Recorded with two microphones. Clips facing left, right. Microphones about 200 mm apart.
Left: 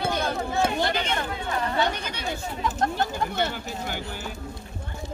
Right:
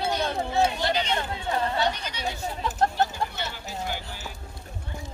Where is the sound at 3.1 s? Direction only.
55° left (ahead or behind).